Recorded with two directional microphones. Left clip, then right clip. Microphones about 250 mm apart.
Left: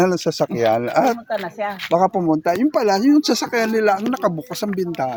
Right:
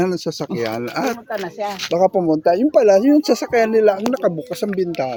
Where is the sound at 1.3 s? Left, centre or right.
Right.